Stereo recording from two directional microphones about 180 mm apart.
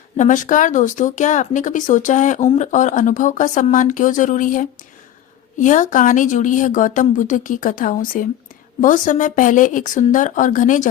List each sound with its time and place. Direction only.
0.2 s speech: 45° left (ahead or behind)